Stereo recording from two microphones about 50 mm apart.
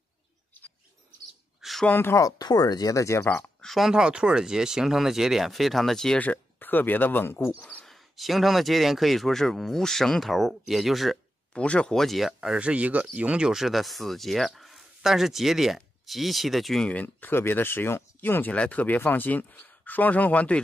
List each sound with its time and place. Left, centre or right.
1.9 s speech: left
2.9 s speech: left
3.6 s a sound: centre
3.9 s speech: centre
6.1 s speech: left
7.8 s speech: centre
11.5 s speech: left
11.9 s speech: centre
12.3 s speech: centre
12.5 s speech: right
13.5 s speech: centre
16.9 s speech: left
17.3 s speech: left
18.5 s speech: left